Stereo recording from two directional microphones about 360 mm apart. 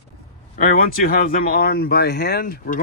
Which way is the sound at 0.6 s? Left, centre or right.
Left.